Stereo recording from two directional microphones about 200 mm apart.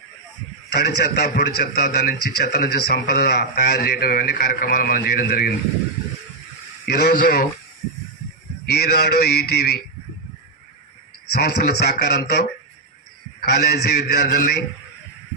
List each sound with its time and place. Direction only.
0.7 s a man's voice: 55° left (ahead or behind)
6.8 s a man's voice: 50° left (ahead or behind)
8.7 s a man's voice: 55° left (ahead or behind)
11.3 s a man's voice: 55° left (ahead or behind)